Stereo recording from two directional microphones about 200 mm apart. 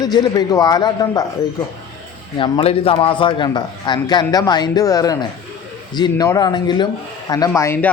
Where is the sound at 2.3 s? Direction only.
25° left (ahead or behind).